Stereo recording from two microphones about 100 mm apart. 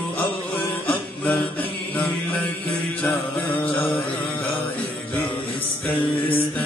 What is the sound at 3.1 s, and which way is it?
Mantra, 15° left (ahead or behind).